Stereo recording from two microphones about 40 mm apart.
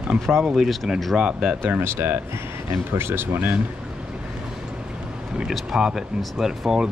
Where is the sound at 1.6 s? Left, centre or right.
Right.